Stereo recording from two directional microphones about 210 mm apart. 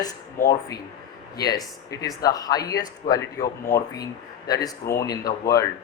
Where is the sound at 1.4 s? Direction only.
20° left (ahead or behind).